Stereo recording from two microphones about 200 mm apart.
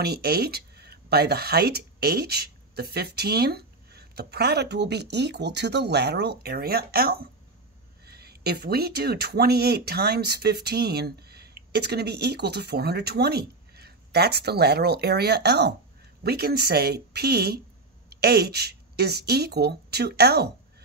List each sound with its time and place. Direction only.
0.0 s speech: 50° right (ahead or behind)